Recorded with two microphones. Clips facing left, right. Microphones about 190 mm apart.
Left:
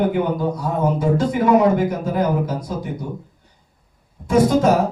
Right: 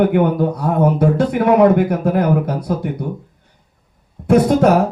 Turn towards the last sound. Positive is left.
turn(degrees=-60)  # may be behind; listen again after turning